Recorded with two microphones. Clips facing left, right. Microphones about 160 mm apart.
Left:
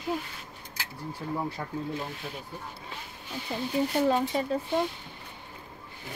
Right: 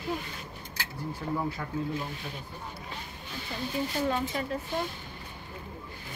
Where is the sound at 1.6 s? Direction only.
30° left (ahead or behind).